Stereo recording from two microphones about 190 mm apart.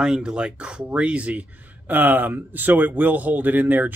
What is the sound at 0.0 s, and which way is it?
A man's voice, 5° right (ahead or behind).